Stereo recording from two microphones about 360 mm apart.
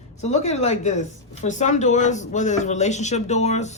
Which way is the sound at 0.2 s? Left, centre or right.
Centre.